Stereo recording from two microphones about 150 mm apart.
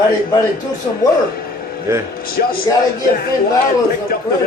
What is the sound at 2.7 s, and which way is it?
Speech, 25° left (ahead or behind).